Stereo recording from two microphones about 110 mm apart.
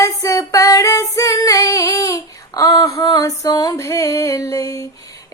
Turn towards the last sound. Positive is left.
turn(degrees=30)  # may be behind; listen again after turning